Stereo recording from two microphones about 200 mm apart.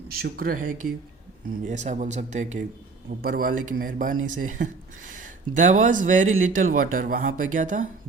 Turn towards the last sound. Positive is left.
turn(degrees=-40)  # may be behind; listen again after turning